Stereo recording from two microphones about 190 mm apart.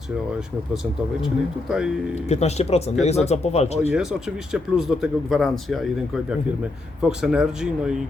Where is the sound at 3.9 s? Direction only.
Centre (ahead or behind).